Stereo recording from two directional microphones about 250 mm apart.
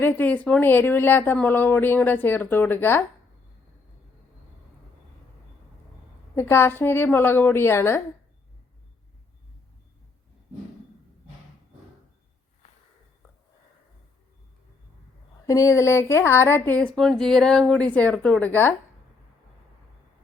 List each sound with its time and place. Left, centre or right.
0.0 s speech: centre
6.3 s speech: centre
12.6 s a sound: left
15.4 s a woman's voice: centre